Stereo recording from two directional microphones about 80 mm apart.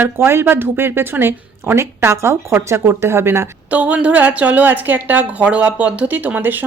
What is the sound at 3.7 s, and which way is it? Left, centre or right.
A woman's voice, centre.